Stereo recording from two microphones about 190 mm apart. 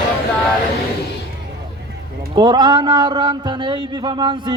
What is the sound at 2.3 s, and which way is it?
Speech, 25° right (ahead or behind).